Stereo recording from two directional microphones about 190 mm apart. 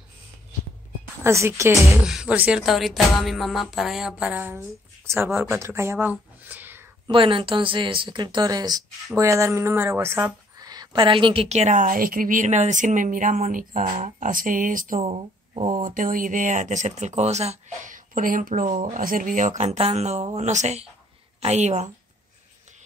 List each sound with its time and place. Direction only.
1.2 s speech: 15° right (ahead or behind)
2.0 s speech: 5° right (ahead or behind)
7.1 s speech: 25° right (ahead or behind); by 15.0 s 45° right (ahead or behind)
15.0 s speech: 30° right (ahead or behind)